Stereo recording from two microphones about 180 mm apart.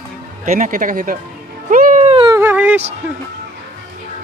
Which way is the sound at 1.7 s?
45° right (ahead or behind).